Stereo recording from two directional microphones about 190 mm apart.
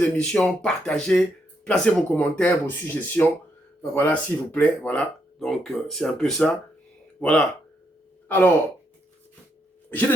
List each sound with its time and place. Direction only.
0.2 s speech: 5° left (ahead or behind)